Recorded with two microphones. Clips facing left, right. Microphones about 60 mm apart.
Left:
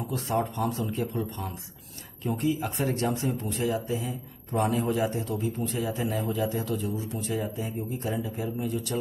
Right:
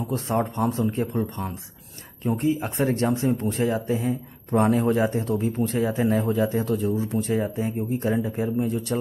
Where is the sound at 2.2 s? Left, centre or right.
Right.